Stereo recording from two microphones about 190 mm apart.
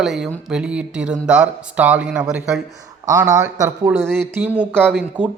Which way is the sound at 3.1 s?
20° right (ahead or behind).